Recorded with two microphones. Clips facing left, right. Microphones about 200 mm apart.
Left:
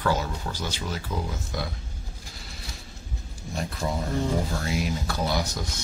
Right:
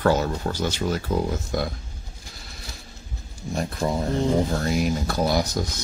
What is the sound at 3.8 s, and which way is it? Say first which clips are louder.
Speech: right 4 dB; 45° right (ahead or behind).